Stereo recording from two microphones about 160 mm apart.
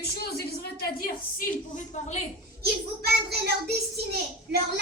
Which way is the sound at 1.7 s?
45° left (ahead or behind).